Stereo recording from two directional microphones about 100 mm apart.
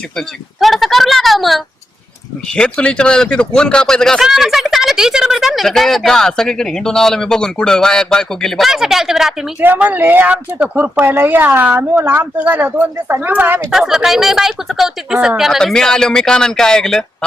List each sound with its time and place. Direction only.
0.2 s a sound: centre (ahead or behind)
2.5 s speech: 10° left (ahead or behind)
9.6 s a woman's voice: 15° right (ahead or behind)
13.7 s speech: 5° right (ahead or behind)